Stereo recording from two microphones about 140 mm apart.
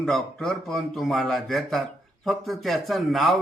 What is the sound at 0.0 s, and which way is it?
A man's voice, centre (ahead or behind).